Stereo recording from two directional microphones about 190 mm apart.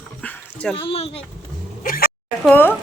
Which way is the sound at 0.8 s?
30° left (ahead or behind).